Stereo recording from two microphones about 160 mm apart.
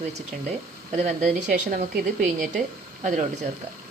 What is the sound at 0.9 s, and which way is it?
Speech, 50° right (ahead or behind).